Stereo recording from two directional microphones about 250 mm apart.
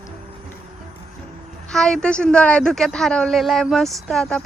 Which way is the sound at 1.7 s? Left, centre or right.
Centre.